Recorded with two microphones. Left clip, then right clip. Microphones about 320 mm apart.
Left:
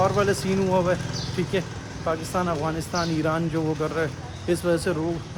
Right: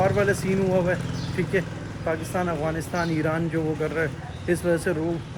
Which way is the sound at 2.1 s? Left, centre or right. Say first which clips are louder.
Left 1 dB; centre.